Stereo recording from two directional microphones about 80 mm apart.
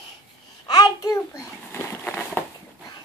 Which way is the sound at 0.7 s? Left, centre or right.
Left.